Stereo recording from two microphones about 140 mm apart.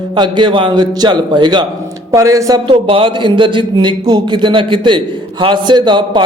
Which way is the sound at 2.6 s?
35° right (ahead or behind).